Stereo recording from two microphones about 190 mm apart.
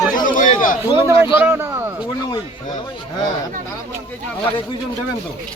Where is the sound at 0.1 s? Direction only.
45° left (ahead or behind).